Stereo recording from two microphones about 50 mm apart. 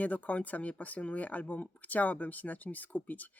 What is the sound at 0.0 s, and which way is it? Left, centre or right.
Speech, left.